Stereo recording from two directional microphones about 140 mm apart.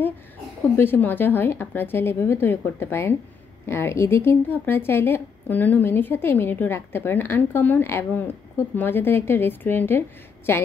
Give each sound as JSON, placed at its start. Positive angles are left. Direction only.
{"t": 0.7, "sound": "a woman's voice", "side_deg": 15}